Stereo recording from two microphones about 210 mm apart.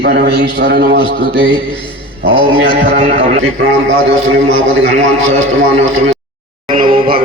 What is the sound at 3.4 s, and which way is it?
A man's voice, 70° right (ahead or behind).